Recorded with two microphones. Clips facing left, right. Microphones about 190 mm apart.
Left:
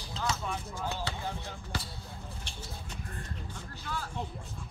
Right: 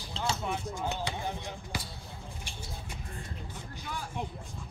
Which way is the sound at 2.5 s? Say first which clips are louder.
Right 1 dB; 10° right (ahead or behind).